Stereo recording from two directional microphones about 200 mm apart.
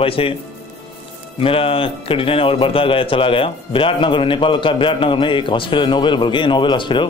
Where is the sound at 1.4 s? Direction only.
25° left (ahead or behind).